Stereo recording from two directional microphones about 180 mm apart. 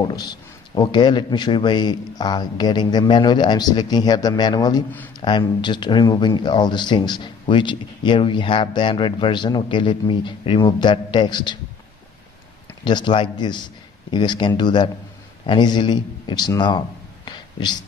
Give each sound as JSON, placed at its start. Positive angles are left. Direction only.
{"t": 0.0, "sound": "speech", "side_deg": 25}
{"t": 12.8, "sound": "a man's voice", "side_deg": 25}